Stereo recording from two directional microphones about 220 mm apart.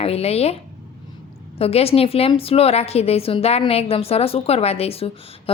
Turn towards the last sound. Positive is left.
turn(degrees=25)  # may be behind; listen again after turning